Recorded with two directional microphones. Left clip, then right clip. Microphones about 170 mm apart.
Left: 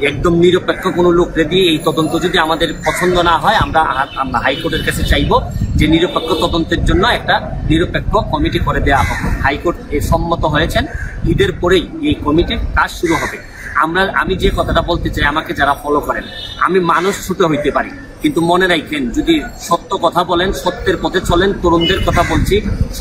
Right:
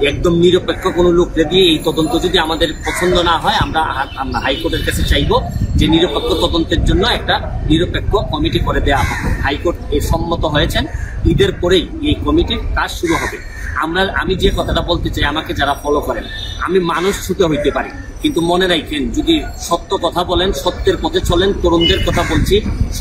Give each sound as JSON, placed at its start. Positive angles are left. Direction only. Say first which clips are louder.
{"t": 0.0, "sound": "a man's voice", "louder": "left 1 dB", "side_deg": 5}
{"t": 13.0, "sound": "a man's voice", "louder": "left 1 dB", "side_deg": -30}
{"t": 13.7, "sound": "a man's voice", "louder": "left 3 dB", "side_deg": 5}